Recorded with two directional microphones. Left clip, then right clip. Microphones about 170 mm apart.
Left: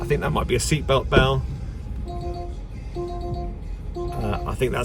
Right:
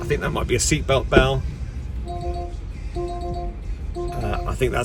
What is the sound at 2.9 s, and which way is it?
Music, 75° left (ahead or behind).